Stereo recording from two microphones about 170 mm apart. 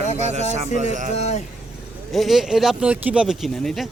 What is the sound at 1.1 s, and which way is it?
Speech, 40° left (ahead or behind).